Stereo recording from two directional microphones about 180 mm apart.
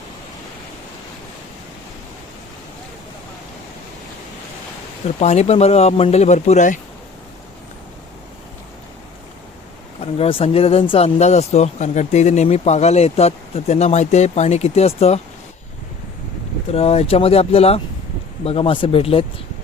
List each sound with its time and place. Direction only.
5.0 s speech: 35° left (ahead or behind)
10.0 s speech: 30° left (ahead or behind)
16.7 s speech: 35° left (ahead or behind)